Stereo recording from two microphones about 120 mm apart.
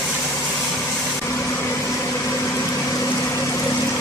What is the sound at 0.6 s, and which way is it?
Vehicle, 5° left (ahead or behind).